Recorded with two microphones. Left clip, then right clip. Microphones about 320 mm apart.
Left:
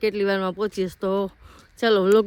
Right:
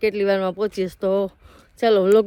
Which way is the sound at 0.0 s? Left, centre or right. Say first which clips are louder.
Right 3 dB; centre.